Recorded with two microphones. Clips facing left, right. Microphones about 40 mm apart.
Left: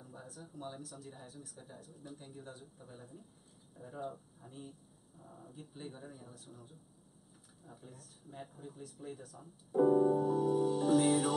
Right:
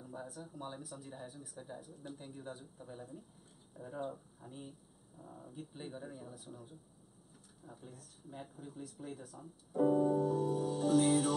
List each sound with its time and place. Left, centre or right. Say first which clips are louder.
0.0 s speech: right 4 dB; centre
10.1 s music: left 2 dB; centre